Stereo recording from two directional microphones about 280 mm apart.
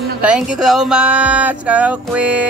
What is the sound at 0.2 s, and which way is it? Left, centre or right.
Speech, centre.